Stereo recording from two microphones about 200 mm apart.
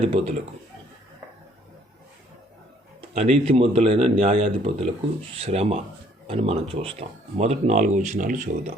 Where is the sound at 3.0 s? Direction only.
30° right (ahead or behind).